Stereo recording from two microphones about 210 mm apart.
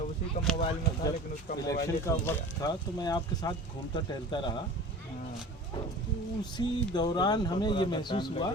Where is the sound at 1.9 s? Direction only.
15° left (ahead or behind).